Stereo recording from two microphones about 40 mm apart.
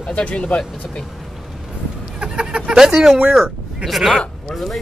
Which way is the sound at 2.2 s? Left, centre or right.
Right.